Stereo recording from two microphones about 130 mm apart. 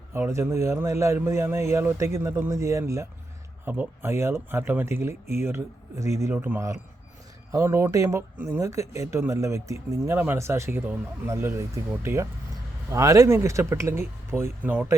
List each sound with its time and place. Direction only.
0.1 s speech: 20° right (ahead or behind)